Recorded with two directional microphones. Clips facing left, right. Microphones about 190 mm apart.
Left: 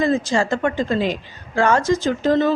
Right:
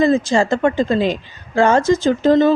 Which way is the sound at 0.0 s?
25° right (ahead or behind).